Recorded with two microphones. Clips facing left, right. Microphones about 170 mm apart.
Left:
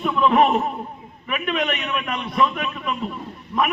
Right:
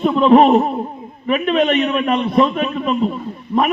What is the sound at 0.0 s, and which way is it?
A man's voice, 30° right (ahead or behind).